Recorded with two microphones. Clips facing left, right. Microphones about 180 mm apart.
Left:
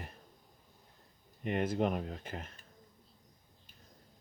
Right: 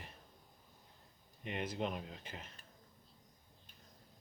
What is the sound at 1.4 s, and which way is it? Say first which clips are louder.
Speech: left 8 dB; 50° left (ahead or behind).